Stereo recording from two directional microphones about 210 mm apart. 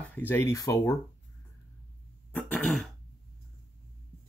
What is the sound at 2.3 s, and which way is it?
Throat clearing, 5° left (ahead or behind).